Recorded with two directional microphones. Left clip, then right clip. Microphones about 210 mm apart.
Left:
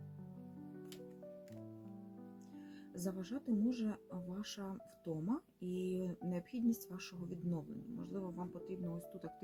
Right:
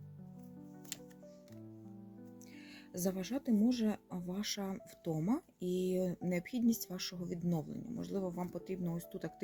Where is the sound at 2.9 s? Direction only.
35° right (ahead or behind).